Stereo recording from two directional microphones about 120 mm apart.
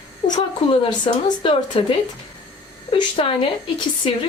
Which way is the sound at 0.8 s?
45° left (ahead or behind).